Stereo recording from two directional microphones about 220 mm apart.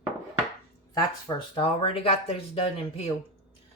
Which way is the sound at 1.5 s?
25° left (ahead or behind).